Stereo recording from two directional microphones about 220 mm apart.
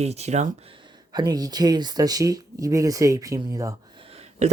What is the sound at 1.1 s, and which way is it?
Speech, 15° right (ahead or behind).